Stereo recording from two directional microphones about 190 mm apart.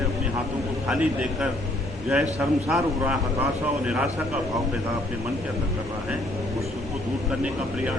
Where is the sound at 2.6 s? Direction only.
5° right (ahead or behind).